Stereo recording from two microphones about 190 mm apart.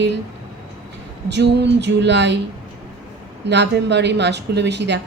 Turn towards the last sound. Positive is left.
turn(degrees=-65)  # may be behind; listen again after turning